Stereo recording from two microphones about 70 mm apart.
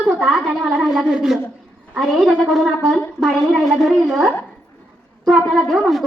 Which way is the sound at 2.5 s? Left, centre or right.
Centre.